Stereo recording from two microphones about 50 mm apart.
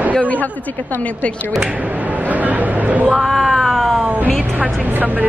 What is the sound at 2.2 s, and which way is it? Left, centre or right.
Speech, right.